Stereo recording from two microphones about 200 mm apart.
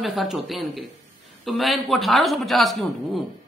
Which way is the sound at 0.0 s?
Centre (ahead or behind).